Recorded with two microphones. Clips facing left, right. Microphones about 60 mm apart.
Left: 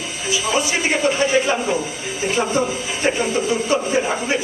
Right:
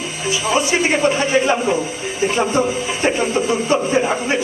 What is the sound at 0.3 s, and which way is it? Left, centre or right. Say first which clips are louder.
Speech: right 3 dB; right.